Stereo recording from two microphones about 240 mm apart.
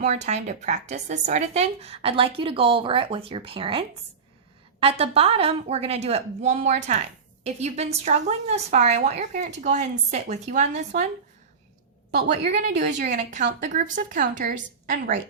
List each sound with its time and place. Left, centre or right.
0.0 s a woman's voice: right
12.5 s a woman's voice: right